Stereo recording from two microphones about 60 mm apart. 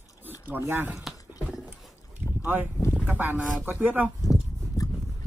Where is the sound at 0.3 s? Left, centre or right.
Right.